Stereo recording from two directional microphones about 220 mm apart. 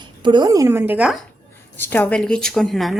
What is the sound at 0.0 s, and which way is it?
A woman's voice, 20° right (ahead or behind).